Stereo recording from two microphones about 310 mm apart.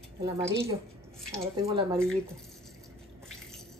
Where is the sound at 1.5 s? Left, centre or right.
Centre.